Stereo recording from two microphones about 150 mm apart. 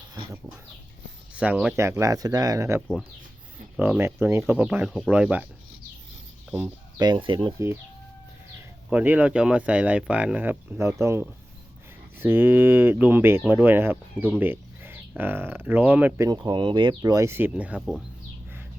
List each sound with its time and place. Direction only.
0.1 s speech: 25° right (ahead or behind)
1.4 s speech: 5° right (ahead or behind)
1.7 s speech: 15° right (ahead or behind)
6.5 s speech: 10° right (ahead or behind)
7.0 s speech: 30° right (ahead or behind)
8.9 s speech: 10° right (ahead or behind)